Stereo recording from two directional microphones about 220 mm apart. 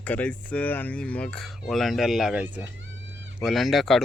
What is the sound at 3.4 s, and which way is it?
Speech, centre (ahead or behind).